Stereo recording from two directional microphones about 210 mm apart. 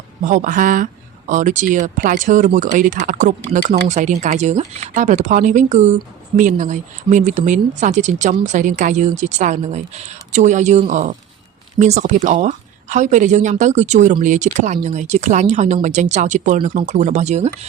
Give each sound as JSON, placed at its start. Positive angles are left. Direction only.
{"t": 0.3, "sound": "speech", "side_deg": -40}